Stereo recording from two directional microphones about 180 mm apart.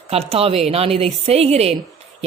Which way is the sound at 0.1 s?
35° right (ahead or behind).